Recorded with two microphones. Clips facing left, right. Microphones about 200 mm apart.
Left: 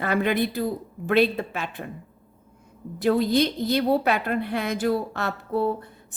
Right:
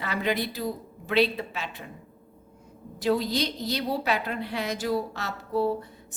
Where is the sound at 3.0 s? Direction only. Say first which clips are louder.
Left 5 dB; 55° left (ahead or behind).